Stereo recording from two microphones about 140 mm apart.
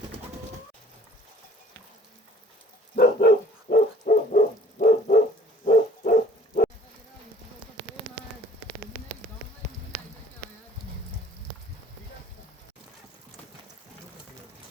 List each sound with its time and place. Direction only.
2.9 s hoot: 90° left; by 5.1 s 70° left (ahead or behind)
5.6 s bow-wow: 75° left (ahead or behind)